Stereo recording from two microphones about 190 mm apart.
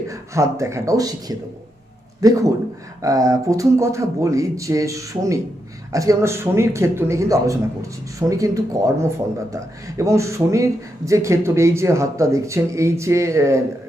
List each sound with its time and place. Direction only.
0.1 s speech: 15° right (ahead or behind)